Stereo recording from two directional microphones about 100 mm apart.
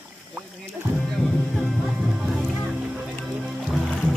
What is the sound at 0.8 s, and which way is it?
Music, 20° right (ahead or behind).